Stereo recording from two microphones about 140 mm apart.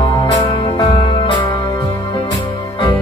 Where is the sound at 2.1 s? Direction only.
35° left (ahead or behind).